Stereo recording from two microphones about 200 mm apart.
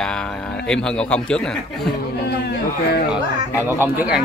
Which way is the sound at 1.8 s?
55° left (ahead or behind).